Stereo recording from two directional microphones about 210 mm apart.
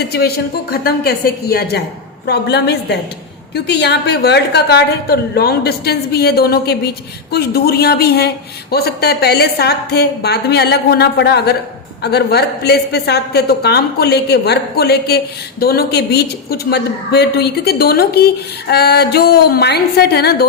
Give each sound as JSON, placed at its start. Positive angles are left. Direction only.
{"t": 0.0, "sound": "a woman's voice", "side_deg": 50}